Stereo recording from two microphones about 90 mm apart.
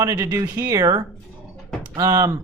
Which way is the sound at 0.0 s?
40° right (ahead or behind).